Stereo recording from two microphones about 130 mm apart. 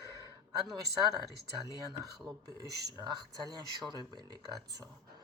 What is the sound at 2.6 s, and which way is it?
Speech, 30° right (ahead or behind).